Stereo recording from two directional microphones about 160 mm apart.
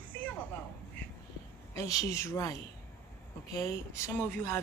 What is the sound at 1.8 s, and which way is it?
Speech, 20° left (ahead or behind).